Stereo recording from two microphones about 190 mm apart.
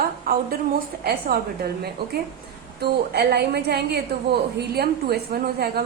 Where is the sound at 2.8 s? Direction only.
55° right (ahead or behind).